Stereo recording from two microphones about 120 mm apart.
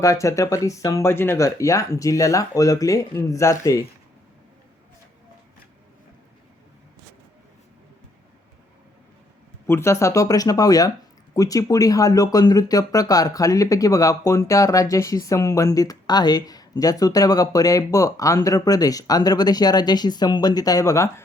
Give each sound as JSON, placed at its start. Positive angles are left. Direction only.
{"t": 0.0, "sound": "speech", "side_deg": 25}
{"t": 9.6, "sound": "speech", "side_deg": 20}